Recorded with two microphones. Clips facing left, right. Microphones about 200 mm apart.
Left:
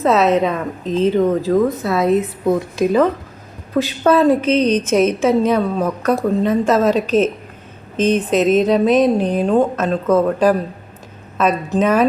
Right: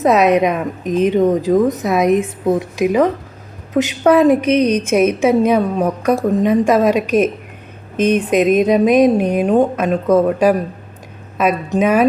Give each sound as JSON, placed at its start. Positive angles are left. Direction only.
{"t": 0.0, "sound": "a woman's voice", "side_deg": -15}